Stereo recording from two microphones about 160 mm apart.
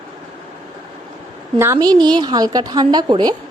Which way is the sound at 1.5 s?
15° right (ahead or behind).